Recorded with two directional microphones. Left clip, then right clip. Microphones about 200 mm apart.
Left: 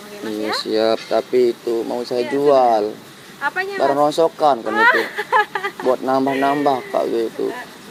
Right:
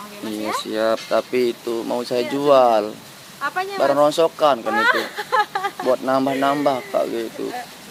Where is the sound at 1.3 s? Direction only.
25° right (ahead or behind).